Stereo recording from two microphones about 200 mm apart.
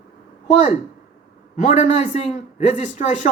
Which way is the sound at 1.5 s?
35° left (ahead or behind).